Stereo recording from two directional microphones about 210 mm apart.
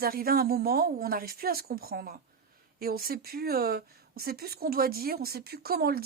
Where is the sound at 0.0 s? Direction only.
45° right (ahead or behind).